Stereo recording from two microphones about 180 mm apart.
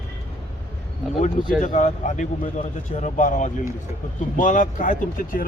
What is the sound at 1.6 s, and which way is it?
Speech, 45° left (ahead or behind).